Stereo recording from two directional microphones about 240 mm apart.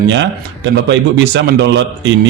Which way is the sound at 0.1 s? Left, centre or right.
Right.